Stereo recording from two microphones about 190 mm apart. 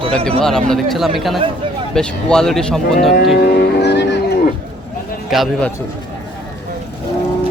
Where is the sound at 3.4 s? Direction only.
60° left (ahead or behind).